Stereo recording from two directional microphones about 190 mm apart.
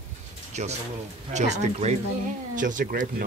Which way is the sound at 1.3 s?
35° right (ahead or behind).